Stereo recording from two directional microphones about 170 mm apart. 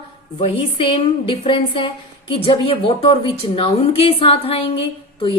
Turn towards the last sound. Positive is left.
turn(degrees=30)  # may be behind; listen again after turning